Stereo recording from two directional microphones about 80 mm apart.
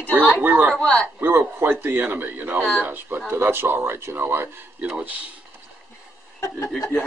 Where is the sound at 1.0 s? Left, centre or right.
Right.